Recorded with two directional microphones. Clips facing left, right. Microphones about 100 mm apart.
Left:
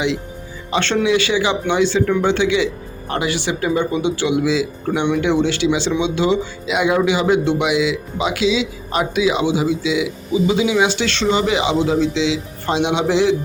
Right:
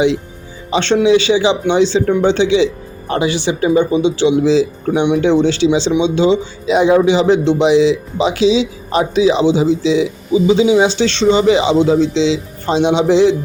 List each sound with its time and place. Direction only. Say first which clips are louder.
0.7 s speech: right 5 dB; 20° right (ahead or behind)